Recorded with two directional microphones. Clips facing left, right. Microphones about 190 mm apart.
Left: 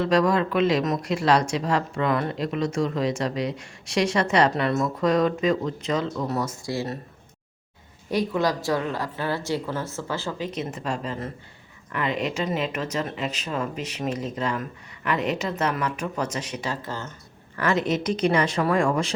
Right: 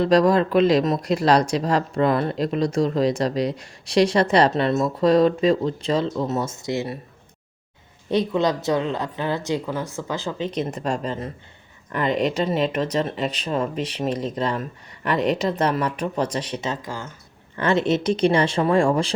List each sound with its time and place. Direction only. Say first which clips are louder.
0.0 s speech: right 4 dB; 35° right (ahead or behind); by 6.8 s 20° right (ahead or behind)
8.1 s a woman's voice: right 3 dB; 20° right (ahead or behind)